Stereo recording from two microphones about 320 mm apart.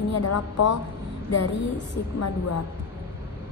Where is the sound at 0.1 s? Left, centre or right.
Left.